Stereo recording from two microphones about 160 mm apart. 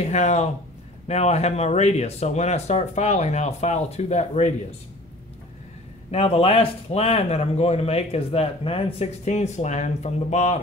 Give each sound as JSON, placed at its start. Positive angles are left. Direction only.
{"t": 0.0, "sound": "speech", "side_deg": 45}
{"t": 6.1, "sound": "speech", "side_deg": 35}